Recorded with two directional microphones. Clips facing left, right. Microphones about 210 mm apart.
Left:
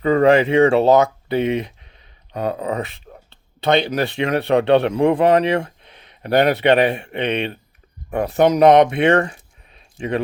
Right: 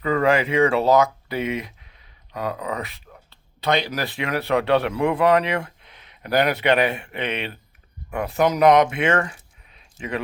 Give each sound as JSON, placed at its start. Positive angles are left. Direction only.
{"t": 0.0, "sound": "speech", "side_deg": 30}